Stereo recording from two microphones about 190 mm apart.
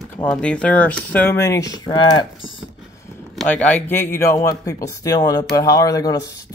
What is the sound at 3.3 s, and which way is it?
Speech, 5° left (ahead or behind).